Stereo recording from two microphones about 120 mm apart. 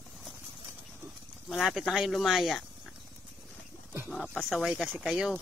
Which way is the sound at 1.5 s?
Centre (ahead or behind).